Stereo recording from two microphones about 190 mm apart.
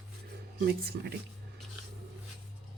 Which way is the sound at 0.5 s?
55° right (ahead or behind).